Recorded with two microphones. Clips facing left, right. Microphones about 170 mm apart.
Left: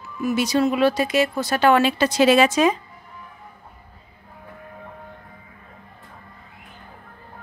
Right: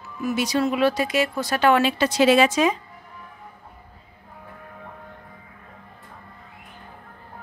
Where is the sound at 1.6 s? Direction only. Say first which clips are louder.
Left 2 dB; 40° left (ahead or behind).